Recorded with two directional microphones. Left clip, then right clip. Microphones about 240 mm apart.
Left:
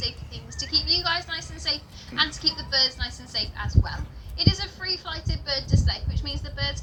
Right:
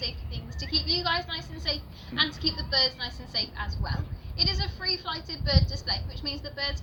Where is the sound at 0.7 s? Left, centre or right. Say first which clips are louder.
Left 3 dB; centre.